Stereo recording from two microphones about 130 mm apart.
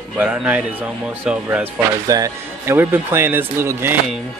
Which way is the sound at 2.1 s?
25° right (ahead or behind).